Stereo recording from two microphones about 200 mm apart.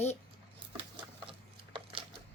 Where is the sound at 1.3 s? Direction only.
25° right (ahead or behind).